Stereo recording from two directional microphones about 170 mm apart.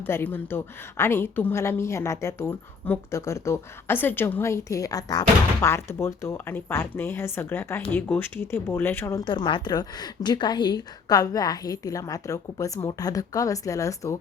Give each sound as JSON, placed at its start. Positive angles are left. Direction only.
{"t": 0.0, "sound": "a woman's voice", "side_deg": 10}